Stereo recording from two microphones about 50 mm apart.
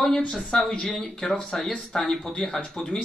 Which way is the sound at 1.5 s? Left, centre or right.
Centre.